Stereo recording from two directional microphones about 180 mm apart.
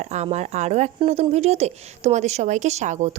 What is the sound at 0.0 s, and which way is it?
Speech, 40° right (ahead or behind).